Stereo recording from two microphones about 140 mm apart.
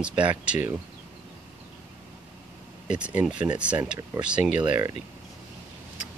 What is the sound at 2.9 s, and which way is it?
Speech, 10° right (ahead or behind).